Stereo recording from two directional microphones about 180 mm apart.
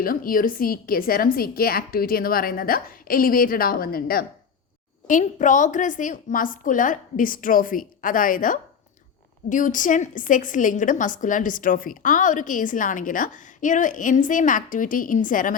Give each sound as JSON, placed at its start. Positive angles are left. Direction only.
{"t": 0.0, "sound": "a woman's voice", "side_deg": 50}
{"t": 5.0, "sound": "a woman's voice", "side_deg": 45}